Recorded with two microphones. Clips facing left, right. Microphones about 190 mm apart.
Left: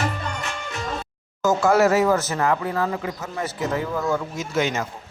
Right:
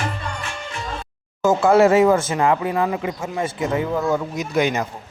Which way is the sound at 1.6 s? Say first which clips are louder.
Right 4 dB; 30° right (ahead or behind).